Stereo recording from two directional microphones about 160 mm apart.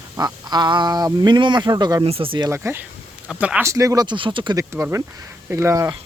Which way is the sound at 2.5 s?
15° right (ahead or behind).